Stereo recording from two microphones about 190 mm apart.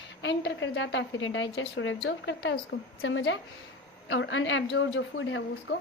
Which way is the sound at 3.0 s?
80° left.